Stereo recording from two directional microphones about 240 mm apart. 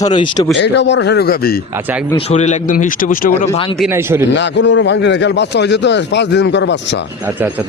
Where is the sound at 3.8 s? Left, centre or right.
Centre.